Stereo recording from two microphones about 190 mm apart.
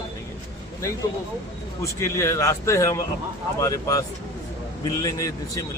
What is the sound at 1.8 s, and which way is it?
A man's voice, 15° left (ahead or behind).